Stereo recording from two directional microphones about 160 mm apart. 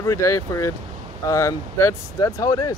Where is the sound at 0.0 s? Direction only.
20° left (ahead or behind).